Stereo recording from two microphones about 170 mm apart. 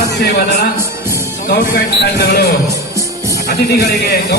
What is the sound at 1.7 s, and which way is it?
Speech, 75° left (ahead or behind).